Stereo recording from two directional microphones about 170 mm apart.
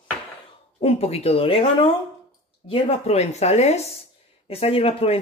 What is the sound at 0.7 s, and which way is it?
Speech, 35° left (ahead or behind).